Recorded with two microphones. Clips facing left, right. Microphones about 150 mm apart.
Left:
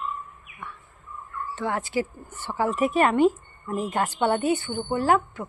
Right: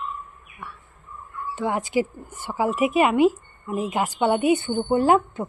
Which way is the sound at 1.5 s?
15° right (ahead or behind).